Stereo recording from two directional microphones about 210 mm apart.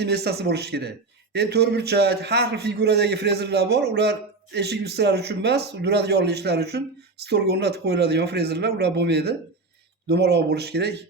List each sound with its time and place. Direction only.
0.0 s a man's voice: 50° right (ahead or behind)